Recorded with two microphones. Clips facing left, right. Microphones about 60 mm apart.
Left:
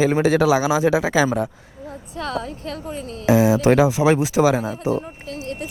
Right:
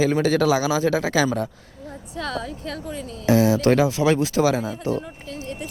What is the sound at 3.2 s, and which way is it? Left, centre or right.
Speech, centre.